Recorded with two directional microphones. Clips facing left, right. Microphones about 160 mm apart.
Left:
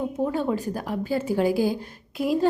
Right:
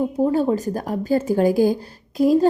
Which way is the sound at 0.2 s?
35° right (ahead or behind).